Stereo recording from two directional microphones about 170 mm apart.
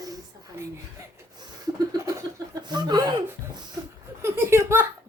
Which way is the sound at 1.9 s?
20° right (ahead or behind).